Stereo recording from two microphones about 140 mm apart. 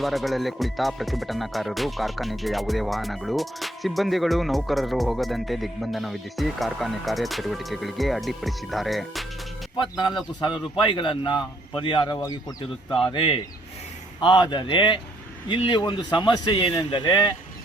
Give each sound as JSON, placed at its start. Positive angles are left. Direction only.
{"t": 0.0, "sound": "speech", "side_deg": 0}
{"t": 9.7, "sound": "a man's voice", "side_deg": 35}